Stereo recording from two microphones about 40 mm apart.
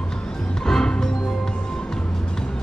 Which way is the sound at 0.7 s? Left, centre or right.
Centre.